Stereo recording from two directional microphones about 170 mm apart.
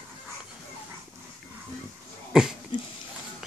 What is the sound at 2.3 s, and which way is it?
Dog, 5° right (ahead or behind).